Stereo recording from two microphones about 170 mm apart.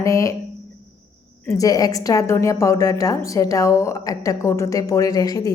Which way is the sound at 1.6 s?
20° left (ahead or behind).